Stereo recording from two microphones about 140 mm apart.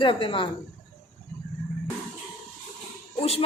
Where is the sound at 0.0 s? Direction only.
40° left (ahead or behind).